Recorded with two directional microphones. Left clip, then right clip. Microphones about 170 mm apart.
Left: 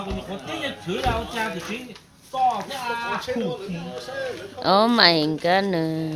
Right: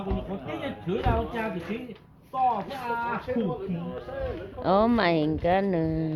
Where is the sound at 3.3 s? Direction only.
45° left (ahead or behind).